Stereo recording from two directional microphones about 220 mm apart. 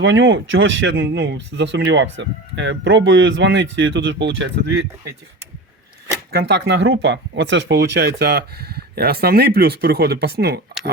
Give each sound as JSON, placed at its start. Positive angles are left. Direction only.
{"t": 0.0, "sound": "speech", "side_deg": -55}
{"t": 6.3, "sound": "speech", "side_deg": -50}